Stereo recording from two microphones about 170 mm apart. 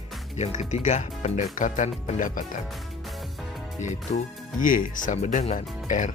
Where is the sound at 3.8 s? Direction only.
50° left (ahead or behind).